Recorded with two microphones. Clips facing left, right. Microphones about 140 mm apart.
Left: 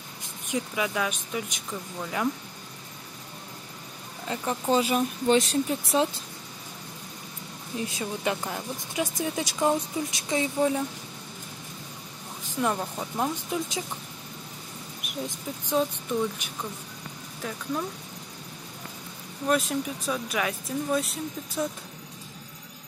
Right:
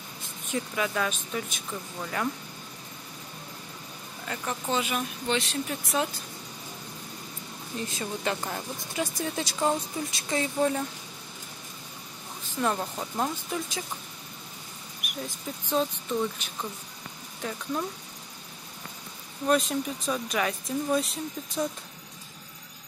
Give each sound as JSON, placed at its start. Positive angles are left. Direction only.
{"t": 0.5, "sound": "speech", "side_deg": 15}
{"t": 4.3, "sound": "speech", "side_deg": 30}
{"t": 5.7, "sound": "speech", "side_deg": 25}
{"t": 7.7, "sound": "speech", "side_deg": 10}
{"t": 12.4, "sound": "speech", "side_deg": 10}
{"t": 13.5, "sound": "speech", "side_deg": 15}
{"t": 15.0, "sound": "a sound", "side_deg": 25}
{"t": 15.6, "sound": "speech", "side_deg": 10}
{"t": 17.4, "sound": "speech", "side_deg": 0}
{"t": 19.4, "sound": "speech", "side_deg": 0}